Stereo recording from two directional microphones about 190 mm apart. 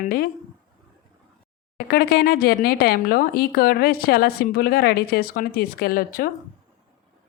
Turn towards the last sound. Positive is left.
turn(degrees=50)  # may be behind; listen again after turning